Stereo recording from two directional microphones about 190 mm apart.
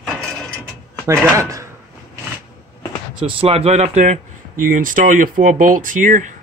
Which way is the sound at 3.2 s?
30° right (ahead or behind).